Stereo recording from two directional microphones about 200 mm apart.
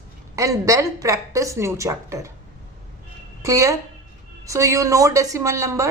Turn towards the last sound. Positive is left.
turn(degrees=-15)  # may be behind; listen again after turning